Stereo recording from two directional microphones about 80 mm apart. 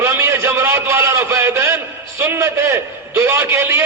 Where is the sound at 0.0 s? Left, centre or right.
Right.